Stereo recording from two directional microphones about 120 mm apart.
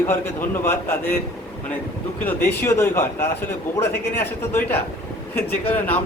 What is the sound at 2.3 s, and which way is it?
A man's voice, 20° left (ahead or behind).